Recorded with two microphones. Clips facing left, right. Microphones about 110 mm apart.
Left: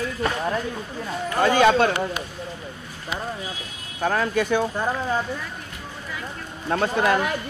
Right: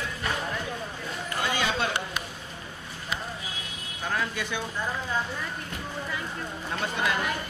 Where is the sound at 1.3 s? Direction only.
50° left (ahead or behind).